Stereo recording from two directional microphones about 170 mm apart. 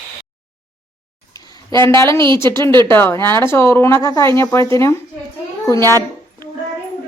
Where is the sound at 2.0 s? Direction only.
15° left (ahead or behind).